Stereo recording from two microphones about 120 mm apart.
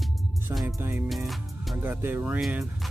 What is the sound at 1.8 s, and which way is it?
Speech, 15° right (ahead or behind).